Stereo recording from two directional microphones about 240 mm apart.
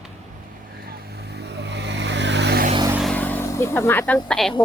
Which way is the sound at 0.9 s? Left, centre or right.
Right.